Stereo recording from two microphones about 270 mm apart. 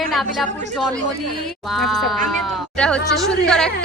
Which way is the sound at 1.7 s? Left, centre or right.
Centre.